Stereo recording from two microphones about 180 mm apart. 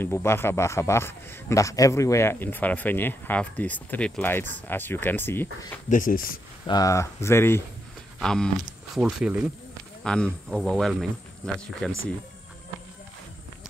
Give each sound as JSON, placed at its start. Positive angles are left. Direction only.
{"t": 0.0, "sound": "a man's voice", "side_deg": 15}
{"t": 5.9, "sound": "speech", "side_deg": 50}
{"t": 6.7, "sound": "a man's voice", "side_deg": 20}
{"t": 8.2, "sound": "livestock", "side_deg": 5}
{"t": 8.9, "sound": "speech", "side_deg": -5}